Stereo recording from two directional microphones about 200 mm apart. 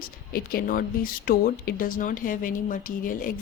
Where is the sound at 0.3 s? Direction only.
50° left (ahead or behind).